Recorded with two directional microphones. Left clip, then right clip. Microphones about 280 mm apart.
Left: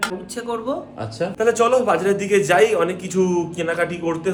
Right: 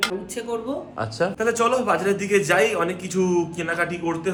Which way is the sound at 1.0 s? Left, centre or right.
Centre.